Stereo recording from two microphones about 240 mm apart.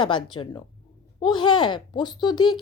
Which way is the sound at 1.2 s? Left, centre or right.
Centre.